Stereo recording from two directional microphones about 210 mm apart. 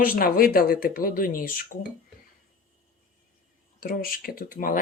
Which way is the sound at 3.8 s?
45° left (ahead or behind).